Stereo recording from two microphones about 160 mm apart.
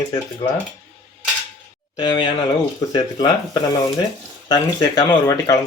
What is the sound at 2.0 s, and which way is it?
Speech, 30° left (ahead or behind).